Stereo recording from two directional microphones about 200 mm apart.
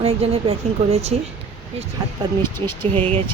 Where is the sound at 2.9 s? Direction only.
25° right (ahead or behind).